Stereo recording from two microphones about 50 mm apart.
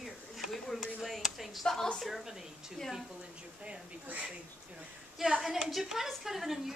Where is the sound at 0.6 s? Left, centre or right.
Centre.